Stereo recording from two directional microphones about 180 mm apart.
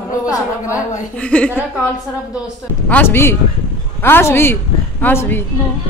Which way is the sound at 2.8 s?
10° left (ahead or behind).